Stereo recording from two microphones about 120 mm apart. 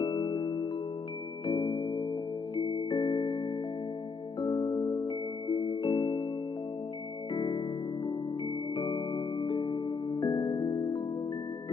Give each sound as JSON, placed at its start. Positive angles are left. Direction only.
{"t": 0.0, "sound": "music", "side_deg": 35}
{"t": 4.4, "sound": "music", "side_deg": 30}
{"t": 7.3, "sound": "music", "side_deg": 40}
{"t": 8.7, "sound": "music", "side_deg": 35}